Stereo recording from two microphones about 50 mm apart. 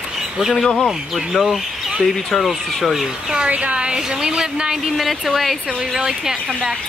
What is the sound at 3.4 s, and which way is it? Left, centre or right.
A woman's voice, right.